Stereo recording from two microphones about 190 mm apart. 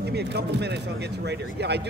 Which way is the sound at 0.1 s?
60° right (ahead or behind).